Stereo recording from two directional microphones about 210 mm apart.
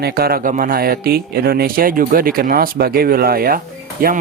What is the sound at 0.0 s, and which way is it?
Speech, 45° right (ahead or behind).